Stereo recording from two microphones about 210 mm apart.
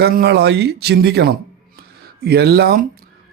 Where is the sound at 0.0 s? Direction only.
50° right (ahead or behind).